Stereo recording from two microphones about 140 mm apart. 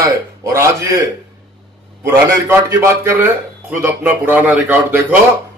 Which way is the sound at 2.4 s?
20° right (ahead or behind).